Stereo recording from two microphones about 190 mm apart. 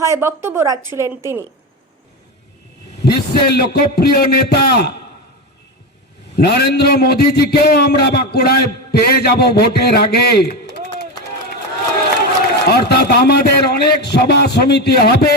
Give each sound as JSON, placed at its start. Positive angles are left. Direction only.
{"t": 0.0, "sound": "speech", "side_deg": -15}
{"t": 3.0, "sound": "a man's voice", "side_deg": 55}
{"t": 6.4, "sound": "a man's voice", "side_deg": 55}
{"t": 12.6, "sound": "a man's voice", "side_deg": 55}